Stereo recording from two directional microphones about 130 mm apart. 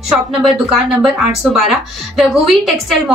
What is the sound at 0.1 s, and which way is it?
Speech, centre (ahead or behind).